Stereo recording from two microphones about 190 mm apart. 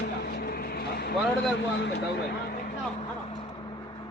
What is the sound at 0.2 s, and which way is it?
Vehicle, 55° left (ahead or behind).